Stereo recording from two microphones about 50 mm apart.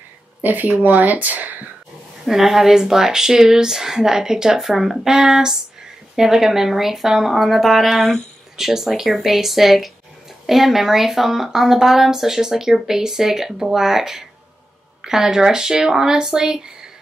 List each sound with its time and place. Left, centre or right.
0.4 s speech: right
2.2 s speech: centre